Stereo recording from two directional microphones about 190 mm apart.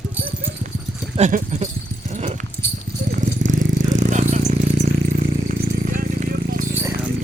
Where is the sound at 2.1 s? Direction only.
35° right (ahead or behind).